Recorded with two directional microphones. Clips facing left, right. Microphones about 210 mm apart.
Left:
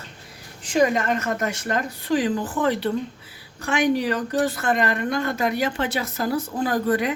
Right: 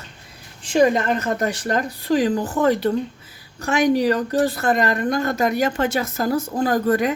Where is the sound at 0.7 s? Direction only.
30° right (ahead or behind).